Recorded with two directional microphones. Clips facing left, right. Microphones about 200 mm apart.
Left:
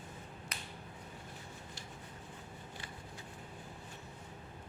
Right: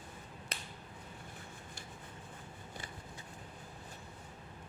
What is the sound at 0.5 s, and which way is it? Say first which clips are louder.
Finger snapping: right 3 dB; 30° right (ahead or behind).